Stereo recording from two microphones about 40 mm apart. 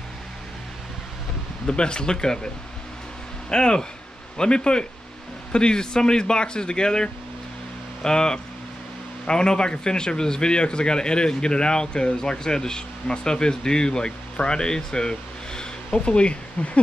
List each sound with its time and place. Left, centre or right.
1.7 s speech: left